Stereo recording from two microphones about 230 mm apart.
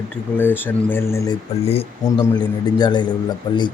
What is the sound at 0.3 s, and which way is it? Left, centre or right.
Speech, centre.